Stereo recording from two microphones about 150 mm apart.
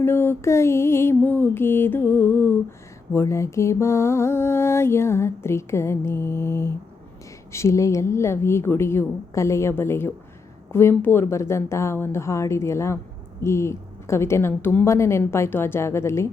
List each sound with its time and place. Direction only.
0.0 s mantra: 15° left (ahead or behind)
10.7 s a woman's voice: 15° left (ahead or behind)
13.4 s mantra: 20° left (ahead or behind)